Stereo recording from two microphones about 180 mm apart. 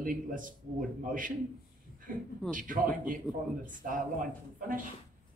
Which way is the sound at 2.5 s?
50° right (ahead or behind).